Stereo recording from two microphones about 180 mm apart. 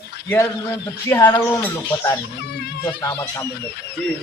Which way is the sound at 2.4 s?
65° left (ahead or behind).